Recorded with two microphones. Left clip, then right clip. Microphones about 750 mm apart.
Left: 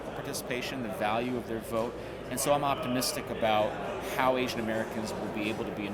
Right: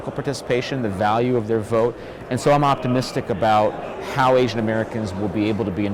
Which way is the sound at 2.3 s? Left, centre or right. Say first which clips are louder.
Right 11 dB; right.